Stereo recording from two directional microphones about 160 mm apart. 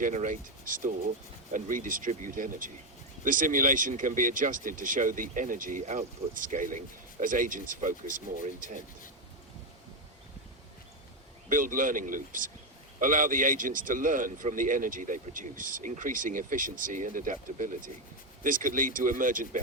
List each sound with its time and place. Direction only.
0.0 s speech: 50° right (ahead or behind)
11.4 s speech: 55° right (ahead or behind)